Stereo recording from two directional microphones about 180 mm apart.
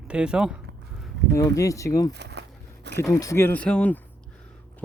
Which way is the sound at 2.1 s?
70° right (ahead or behind).